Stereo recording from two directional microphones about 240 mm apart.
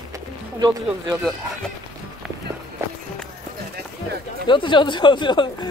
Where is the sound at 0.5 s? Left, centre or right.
Centre.